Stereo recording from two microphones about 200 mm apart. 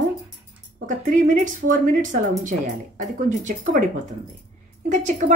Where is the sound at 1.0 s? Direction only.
40° right (ahead or behind).